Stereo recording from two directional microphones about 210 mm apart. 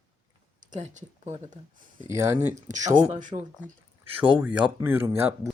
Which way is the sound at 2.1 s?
10° right (ahead or behind).